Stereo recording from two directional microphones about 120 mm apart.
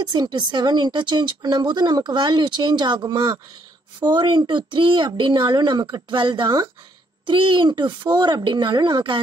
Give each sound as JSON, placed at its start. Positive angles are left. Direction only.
{"t": 0.0, "sound": "a woman's voice", "side_deg": -35}